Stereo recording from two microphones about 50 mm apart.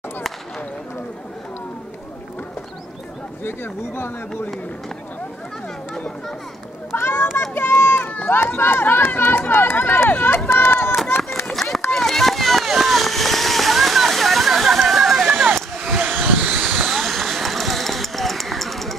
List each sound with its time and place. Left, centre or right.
3.4 s speech: left
6.9 s children playing: left
7.5 s run: left
8.3 s speech: left
11.1 s a sound: left
11.9 s vehicle: centre
15.2 s a sound: centre
16.1 s vehicle: right
16.5 s a sound: centre